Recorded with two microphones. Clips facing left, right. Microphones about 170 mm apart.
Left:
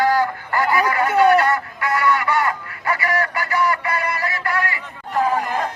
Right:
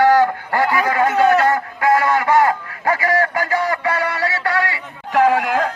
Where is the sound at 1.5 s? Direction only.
90° right.